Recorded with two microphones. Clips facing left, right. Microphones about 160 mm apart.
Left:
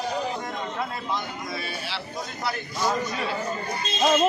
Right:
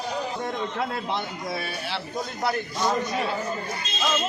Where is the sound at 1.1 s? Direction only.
60° right (ahead or behind).